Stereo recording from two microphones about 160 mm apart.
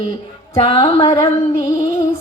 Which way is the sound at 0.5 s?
35° left (ahead or behind).